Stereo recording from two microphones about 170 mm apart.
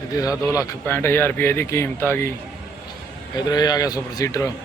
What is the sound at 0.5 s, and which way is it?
Speech, 20° left (ahead or behind).